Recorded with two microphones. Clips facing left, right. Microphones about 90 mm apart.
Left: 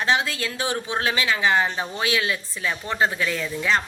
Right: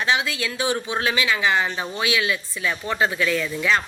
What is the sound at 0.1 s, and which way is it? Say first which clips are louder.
Speech: left 1 dB; 40° left (ahead or behind).